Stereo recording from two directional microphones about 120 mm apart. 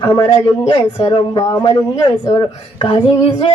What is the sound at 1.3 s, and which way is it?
Speech, 25° left (ahead or behind).